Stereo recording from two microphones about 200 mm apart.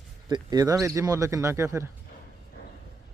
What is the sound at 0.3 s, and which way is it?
Speech, 20° right (ahead or behind).